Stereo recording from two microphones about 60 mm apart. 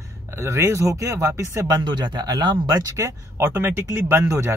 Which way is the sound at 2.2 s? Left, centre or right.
Right.